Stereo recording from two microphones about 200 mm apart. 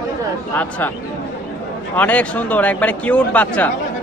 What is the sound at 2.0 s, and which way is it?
A man's voice, 5° left (ahead or behind).